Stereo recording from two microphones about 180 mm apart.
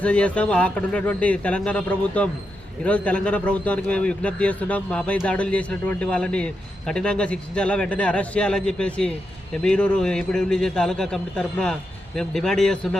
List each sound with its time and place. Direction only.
0.0 s a man's voice: 5° left (ahead or behind)